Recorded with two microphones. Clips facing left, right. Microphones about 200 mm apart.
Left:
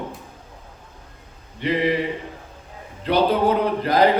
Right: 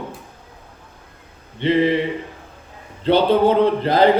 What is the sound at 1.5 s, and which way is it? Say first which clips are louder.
Speech: right 4 dB; 30° right (ahead or behind).